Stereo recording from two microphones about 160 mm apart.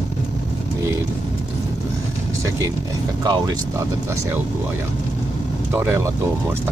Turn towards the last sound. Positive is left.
turn(degrees=-15)  # may be behind; listen again after turning